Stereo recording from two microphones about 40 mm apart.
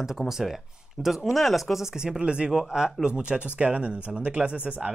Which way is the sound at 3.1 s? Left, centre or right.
Right.